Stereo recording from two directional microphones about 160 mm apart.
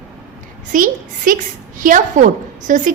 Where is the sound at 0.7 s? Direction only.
55° right (ahead or behind).